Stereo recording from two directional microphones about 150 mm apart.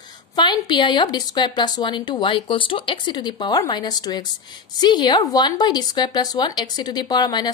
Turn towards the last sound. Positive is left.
turn(degrees=30)  # may be behind; listen again after turning